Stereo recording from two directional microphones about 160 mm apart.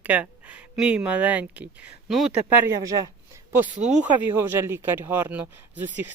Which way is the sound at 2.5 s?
20° right (ahead or behind).